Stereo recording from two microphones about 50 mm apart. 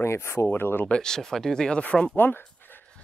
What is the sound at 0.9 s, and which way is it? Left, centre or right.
Speech, centre.